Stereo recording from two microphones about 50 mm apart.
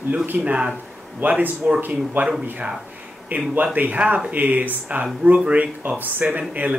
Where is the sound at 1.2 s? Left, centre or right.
Right.